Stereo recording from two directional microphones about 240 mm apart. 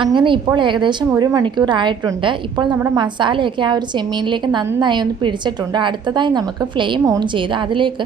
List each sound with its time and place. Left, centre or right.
0.0 s a woman's voice: centre